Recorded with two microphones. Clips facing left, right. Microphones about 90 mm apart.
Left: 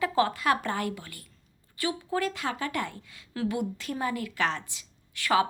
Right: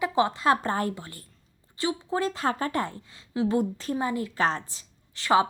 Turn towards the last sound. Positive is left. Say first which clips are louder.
# right 3 dB
turn(degrees=-25)  # may be behind; listen again after turning